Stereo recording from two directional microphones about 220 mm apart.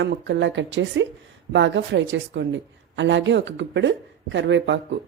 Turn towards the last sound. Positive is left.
turn(degrees=-55)  # may be behind; listen again after turning